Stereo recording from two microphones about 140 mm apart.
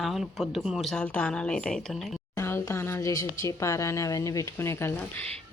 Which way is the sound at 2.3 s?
20° left (ahead or behind).